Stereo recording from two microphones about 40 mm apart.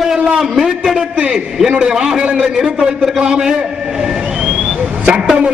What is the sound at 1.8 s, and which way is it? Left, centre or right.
A man's voice, centre.